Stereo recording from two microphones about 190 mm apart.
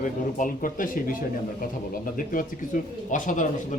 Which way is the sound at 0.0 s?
45° left (ahead or behind).